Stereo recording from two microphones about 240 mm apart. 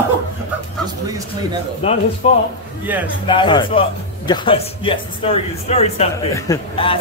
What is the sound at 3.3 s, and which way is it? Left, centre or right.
Speech, centre.